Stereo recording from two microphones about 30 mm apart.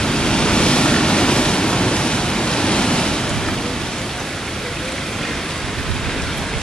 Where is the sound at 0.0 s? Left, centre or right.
Left.